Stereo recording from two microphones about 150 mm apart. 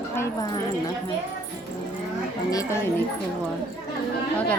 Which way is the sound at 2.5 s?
25° left (ahead or behind).